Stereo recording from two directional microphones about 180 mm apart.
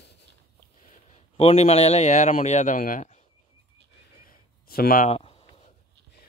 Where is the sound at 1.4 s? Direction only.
35° left (ahead or behind).